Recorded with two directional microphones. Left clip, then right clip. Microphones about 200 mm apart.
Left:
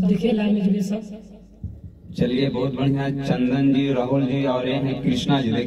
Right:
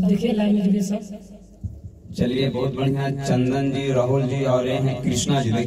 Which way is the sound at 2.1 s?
50° left (ahead or behind).